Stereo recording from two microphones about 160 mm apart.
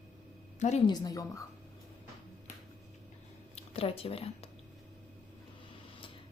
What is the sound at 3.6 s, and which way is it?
Speech, 40° left (ahead or behind).